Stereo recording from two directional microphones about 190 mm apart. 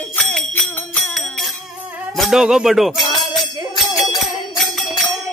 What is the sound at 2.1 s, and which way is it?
Music, centre (ahead or behind).